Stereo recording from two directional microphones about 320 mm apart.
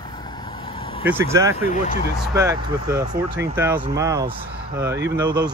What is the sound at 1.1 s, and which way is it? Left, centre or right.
Speech, centre.